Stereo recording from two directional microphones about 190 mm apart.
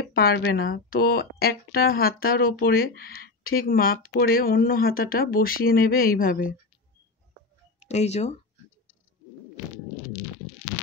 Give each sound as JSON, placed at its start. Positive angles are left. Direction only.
{"t": 0.0, "sound": "speech", "side_deg": 55}
{"t": 7.8, "sound": "speech", "side_deg": 35}